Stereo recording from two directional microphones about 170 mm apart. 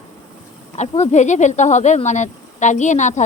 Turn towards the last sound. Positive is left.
turn(degrees=45)  # may be behind; listen again after turning